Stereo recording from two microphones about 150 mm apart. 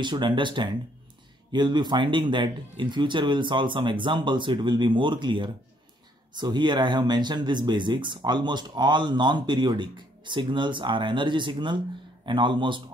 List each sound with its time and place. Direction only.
0.0 s speech: 30° right (ahead or behind)